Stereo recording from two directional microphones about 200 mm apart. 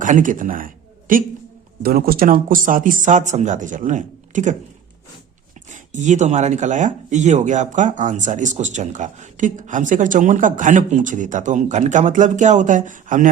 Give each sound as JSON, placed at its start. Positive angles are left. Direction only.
{"t": 0.0, "sound": "speech", "side_deg": -40}
{"t": 5.7, "sound": "speech", "side_deg": -40}